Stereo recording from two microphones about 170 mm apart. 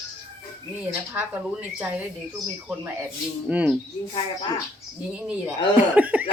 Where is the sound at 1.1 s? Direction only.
10° right (ahead or behind).